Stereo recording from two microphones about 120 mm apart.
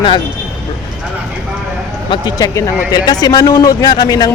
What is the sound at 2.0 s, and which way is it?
Speech, 35° left (ahead or behind).